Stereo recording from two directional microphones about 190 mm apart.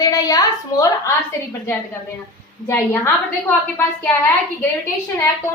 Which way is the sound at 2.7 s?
15° left (ahead or behind).